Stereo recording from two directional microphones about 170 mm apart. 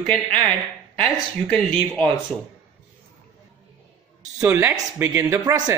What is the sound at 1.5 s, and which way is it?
Speech, 10° left (ahead or behind).